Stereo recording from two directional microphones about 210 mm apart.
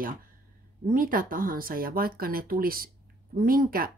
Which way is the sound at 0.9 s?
40° right (ahead or behind).